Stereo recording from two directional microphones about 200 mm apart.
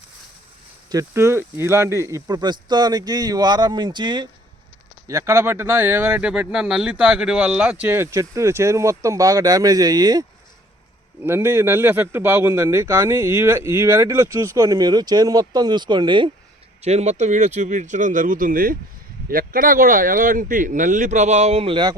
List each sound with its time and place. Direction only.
0.9 s speech: 15° right (ahead or behind)